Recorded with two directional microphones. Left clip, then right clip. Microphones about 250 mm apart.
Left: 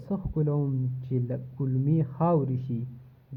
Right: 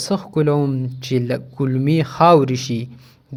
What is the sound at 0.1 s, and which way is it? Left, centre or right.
Speech, right.